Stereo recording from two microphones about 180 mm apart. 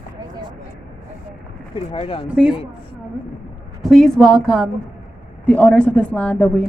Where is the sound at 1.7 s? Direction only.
30° left (ahead or behind).